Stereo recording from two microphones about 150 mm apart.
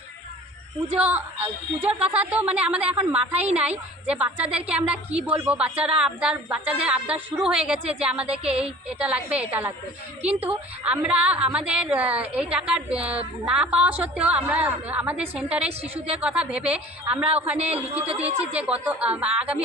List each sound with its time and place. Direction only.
0.9 s a woman's voice: 10° right (ahead or behind)
18.0 s a woman's voice: 40° right (ahead or behind)
18.5 s a woman's voice: 10° right (ahead or behind)